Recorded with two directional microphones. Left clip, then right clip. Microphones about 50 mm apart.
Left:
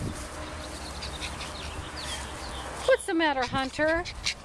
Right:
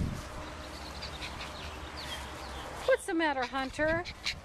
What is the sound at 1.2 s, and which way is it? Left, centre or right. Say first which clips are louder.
Duck: left 4 dB; centre.